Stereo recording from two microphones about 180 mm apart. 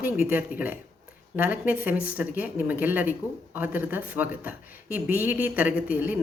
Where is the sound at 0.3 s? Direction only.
10° right (ahead or behind).